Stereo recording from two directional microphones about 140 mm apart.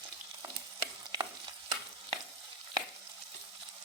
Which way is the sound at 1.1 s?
35° right (ahead or behind).